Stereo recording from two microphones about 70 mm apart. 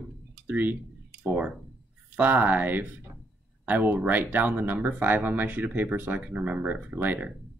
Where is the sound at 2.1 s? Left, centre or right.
Right.